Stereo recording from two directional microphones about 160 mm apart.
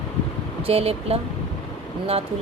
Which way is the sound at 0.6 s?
40° right (ahead or behind).